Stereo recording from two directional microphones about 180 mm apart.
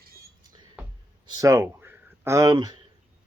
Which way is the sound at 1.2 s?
20° right (ahead or behind).